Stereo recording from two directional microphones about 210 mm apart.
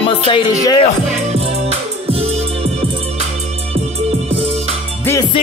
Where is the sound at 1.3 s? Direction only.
30° right (ahead or behind).